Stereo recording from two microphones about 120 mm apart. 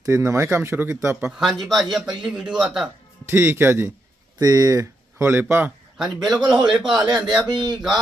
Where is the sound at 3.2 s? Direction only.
20° right (ahead or behind).